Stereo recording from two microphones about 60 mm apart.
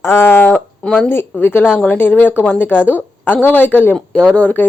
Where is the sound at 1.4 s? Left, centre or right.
Left.